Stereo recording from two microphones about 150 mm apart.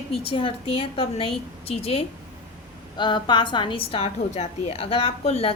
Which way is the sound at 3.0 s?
30° left (ahead or behind).